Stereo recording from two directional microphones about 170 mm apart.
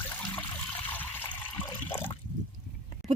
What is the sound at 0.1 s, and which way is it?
Water, 10° left (ahead or behind).